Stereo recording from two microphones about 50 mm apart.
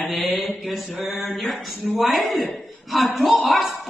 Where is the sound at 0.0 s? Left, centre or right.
Centre.